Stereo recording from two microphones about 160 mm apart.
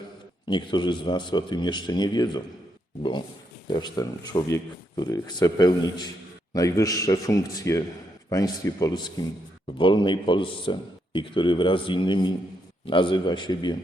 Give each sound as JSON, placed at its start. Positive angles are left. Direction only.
{"t": 0.4, "sound": "a man's voice", "side_deg": 30}